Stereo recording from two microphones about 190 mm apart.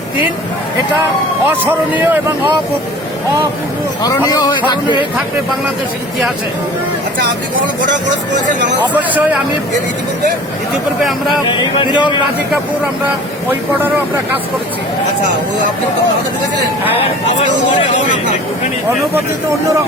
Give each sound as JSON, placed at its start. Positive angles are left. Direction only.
{"t": 1.5, "sound": "speech", "side_deg": -10}
{"t": 4.3, "sound": "a man's voice", "side_deg": 20}
{"t": 8.9, "sound": "speech", "side_deg": -10}
{"t": 11.4, "sound": "speech", "side_deg": 25}
{"t": 13.5, "sound": "speech", "side_deg": -10}